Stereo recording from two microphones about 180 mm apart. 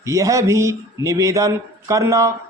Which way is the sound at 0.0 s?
15° right (ahead or behind).